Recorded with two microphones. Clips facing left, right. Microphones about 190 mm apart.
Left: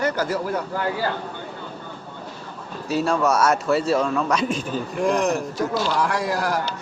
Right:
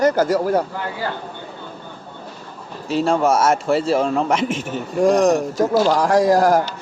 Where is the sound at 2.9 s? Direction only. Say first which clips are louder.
Right 3 dB; 30° right (ahead or behind).